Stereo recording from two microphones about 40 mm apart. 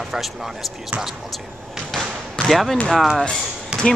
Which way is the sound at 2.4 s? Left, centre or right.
Centre.